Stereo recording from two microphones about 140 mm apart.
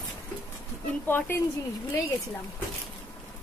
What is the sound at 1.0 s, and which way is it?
Speech, 15° left (ahead or behind).